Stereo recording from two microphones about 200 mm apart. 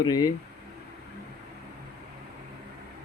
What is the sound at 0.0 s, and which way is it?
Speech, 20° left (ahead or behind).